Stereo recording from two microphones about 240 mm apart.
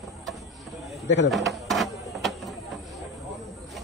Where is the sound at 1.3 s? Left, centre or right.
Centre.